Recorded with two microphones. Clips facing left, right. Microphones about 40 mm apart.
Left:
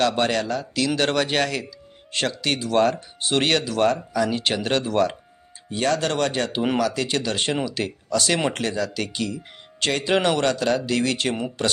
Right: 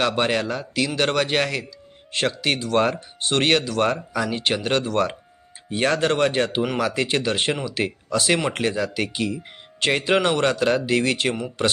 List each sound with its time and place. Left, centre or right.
0.0 s speech: centre
3.8 s speech: centre
4.4 s speech: centre
5.7 s speech: right